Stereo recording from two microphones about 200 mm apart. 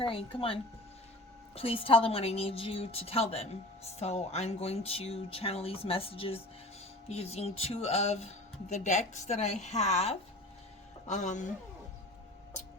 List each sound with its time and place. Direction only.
0.0 s speech: 25° left (ahead or behind)